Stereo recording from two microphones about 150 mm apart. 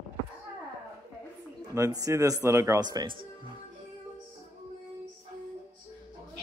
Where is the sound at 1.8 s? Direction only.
20° right (ahead or behind).